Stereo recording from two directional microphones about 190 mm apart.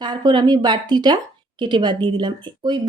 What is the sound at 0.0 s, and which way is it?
Speech, 20° right (ahead or behind).